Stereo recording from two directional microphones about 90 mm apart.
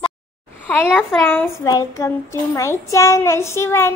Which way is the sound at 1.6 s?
40° left (ahead or behind).